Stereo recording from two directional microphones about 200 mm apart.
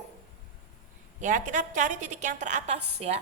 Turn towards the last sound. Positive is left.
turn(degrees=-30)  # may be behind; listen again after turning